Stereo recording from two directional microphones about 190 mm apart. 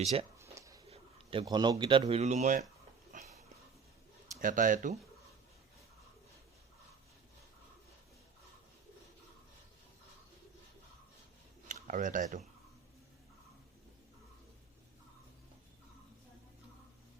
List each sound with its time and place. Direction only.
0.0 s speech: 35° right (ahead or behind)
0.5 s a sound: 15° right (ahead or behind)
0.9 s speech: 30° right (ahead or behind)
3.1 s a sound: 40° right (ahead or behind)
4.4 s speech: 45° right (ahead or behind)
11.7 s speech: 45° right (ahead or behind)